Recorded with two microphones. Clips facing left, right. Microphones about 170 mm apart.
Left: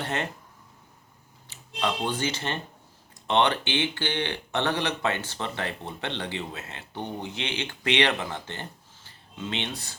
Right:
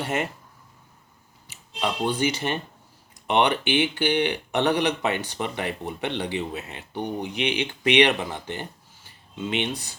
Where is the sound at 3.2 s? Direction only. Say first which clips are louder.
Right 2 dB; 15° right (ahead or behind).